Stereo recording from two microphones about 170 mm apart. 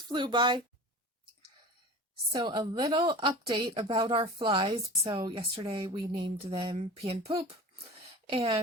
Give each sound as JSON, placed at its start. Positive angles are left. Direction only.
{"t": 0.1, "sound": "a woman's voice", "side_deg": -25}
{"t": 2.3, "sound": "a woman's voice", "side_deg": -25}